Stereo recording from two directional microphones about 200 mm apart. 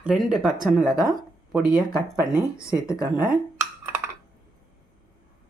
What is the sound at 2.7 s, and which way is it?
Speech, 15° left (ahead or behind).